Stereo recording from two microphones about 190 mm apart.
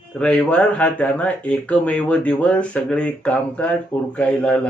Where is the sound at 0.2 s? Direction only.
5° left (ahead or behind).